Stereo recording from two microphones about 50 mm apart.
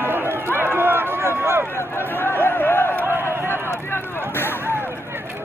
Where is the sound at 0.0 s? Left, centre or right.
Right.